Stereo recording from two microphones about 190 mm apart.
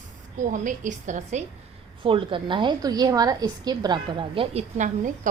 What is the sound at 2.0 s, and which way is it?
A woman's voice, 25° right (ahead or behind).